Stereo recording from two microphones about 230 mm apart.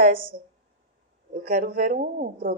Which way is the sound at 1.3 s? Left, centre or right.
Right.